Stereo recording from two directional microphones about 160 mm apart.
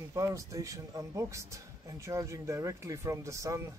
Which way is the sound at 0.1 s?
20° right (ahead or behind).